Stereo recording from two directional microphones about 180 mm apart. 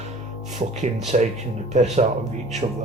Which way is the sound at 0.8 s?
40° right (ahead or behind).